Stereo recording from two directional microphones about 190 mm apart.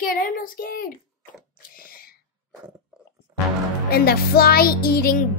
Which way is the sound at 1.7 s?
50° left (ahead or behind).